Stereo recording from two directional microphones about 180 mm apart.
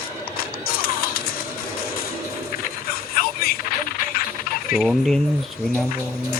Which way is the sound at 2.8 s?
55° left (ahead or behind).